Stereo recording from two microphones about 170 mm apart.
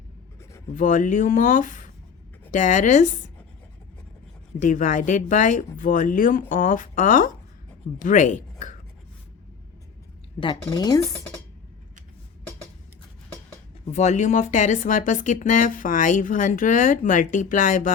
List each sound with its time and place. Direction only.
0.7 s speech: 50° left (ahead or behind)
4.6 s speech: 50° left (ahead or behind)
10.4 s speech: 25° left (ahead or behind)
13.8 s speech: 45° left (ahead or behind)